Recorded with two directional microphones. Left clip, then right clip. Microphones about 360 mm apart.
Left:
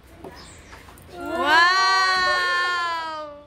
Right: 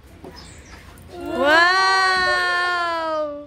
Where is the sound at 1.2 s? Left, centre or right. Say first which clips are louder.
Right 2 dB; centre.